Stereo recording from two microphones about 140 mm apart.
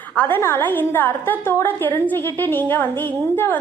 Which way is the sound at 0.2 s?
15° left (ahead or behind).